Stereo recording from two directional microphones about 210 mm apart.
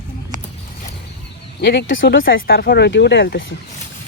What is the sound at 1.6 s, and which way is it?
Speech, 55° left (ahead or behind).